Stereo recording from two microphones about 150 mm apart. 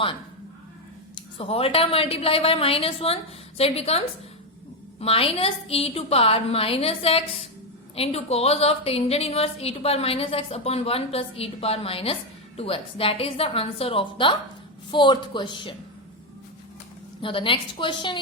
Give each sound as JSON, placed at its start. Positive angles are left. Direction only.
{"t": 1.1, "sound": "a woman's voice", "side_deg": 40}
{"t": 17.2, "sound": "a woman's voice", "side_deg": 35}